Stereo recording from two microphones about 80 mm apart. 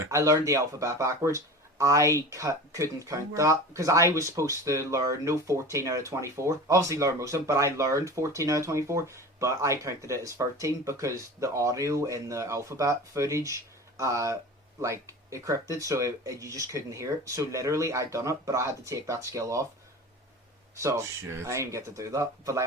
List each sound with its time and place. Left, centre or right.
0.0 s speech: right
20.7 s speech: right